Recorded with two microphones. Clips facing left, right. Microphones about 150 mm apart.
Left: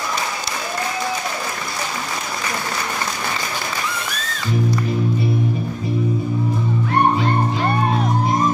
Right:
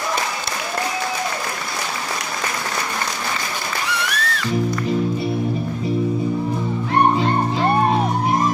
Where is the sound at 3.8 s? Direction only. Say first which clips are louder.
Right 3 dB; 75° right (ahead or behind).